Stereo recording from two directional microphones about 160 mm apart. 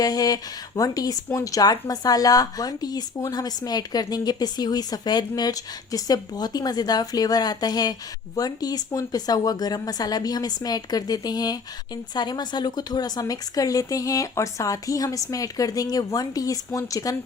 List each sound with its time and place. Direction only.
0.0 s speech: 25° left (ahead or behind)